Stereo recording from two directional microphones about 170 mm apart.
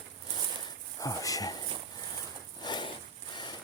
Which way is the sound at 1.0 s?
20° left (ahead or behind).